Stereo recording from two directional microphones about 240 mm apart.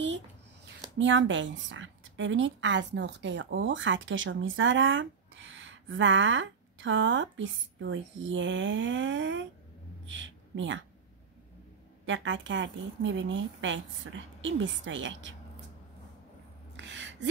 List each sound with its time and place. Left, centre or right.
0.9 s a woman's voice: right
12.1 s a woman's voice: right
16.7 s gasp: right